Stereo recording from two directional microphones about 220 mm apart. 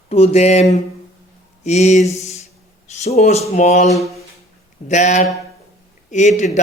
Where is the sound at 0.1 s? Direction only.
30° left (ahead or behind).